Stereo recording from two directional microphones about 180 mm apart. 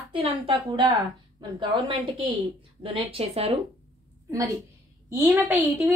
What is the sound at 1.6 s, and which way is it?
Speech, 25° right (ahead or behind).